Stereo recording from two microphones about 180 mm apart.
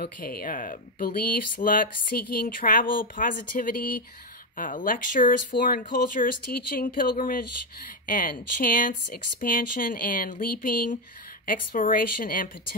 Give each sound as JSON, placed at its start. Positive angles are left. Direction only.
{"t": 0.0, "sound": "speech", "side_deg": 55}